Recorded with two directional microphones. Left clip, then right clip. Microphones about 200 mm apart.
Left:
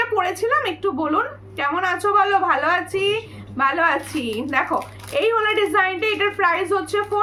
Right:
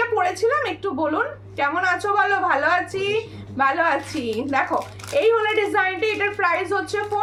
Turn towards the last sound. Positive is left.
turn(degrees=15)  # may be behind; listen again after turning